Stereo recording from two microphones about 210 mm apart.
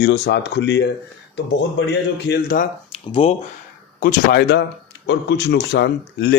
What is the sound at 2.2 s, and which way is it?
Speech, 50° left (ahead or behind).